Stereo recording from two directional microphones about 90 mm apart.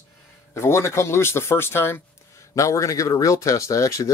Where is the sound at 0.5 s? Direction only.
30° left (ahead or behind).